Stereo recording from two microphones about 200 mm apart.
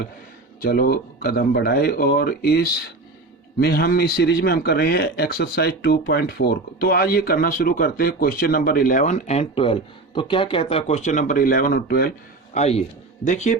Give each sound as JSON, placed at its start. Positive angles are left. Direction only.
{"t": 0.6, "sound": "speech", "side_deg": 50}
{"t": 12.5, "sound": "speech", "side_deg": 30}